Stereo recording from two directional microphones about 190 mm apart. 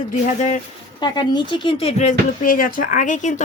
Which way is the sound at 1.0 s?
25° left (ahead or behind).